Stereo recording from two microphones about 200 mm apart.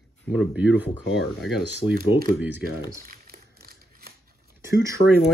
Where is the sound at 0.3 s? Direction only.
5° right (ahead or behind).